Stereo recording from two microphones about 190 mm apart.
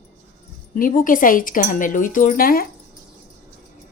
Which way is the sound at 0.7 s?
45° left (ahead or behind).